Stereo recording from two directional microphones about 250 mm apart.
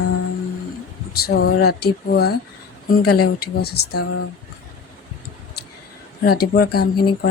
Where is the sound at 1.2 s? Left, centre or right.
Left.